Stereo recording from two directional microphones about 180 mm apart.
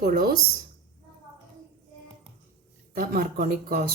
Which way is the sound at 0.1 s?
55° right (ahead or behind).